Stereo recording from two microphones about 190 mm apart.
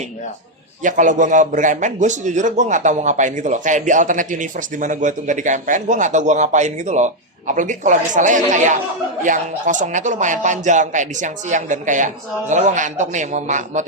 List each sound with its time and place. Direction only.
0.8 s a man's voice: 40° right (ahead or behind)